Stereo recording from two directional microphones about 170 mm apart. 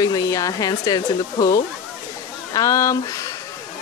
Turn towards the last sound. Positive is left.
turn(degrees=20)  # may be behind; listen again after turning